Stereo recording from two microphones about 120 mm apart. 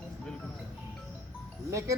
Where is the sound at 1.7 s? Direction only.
25° right (ahead or behind).